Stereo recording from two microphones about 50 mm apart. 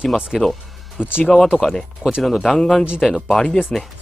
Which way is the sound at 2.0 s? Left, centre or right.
Centre.